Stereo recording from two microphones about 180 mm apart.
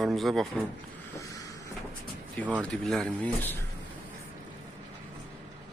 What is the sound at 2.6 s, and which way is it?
Speech, 5° left (ahead or behind).